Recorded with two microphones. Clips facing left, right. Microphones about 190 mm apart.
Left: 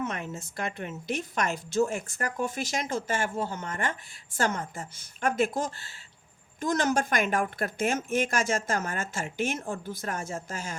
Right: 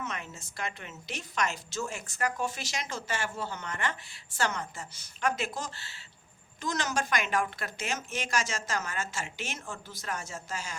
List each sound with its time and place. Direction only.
0.0 s a woman's voice: 55° left (ahead or behind)